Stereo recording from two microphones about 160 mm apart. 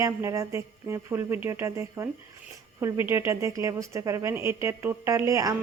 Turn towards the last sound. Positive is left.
turn(degrees=-20)  # may be behind; listen again after turning